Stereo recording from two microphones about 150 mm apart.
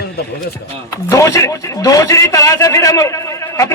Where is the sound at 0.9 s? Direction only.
20° left (ahead or behind).